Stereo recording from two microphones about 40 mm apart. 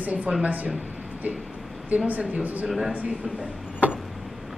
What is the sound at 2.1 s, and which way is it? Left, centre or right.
Speech, right.